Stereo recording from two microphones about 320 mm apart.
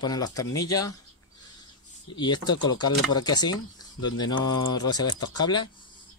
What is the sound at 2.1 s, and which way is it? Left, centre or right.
Speech, centre.